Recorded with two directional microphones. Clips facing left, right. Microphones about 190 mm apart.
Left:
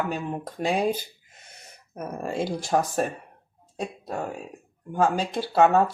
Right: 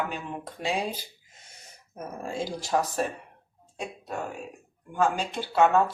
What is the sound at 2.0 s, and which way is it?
Speech, 60° left (ahead or behind).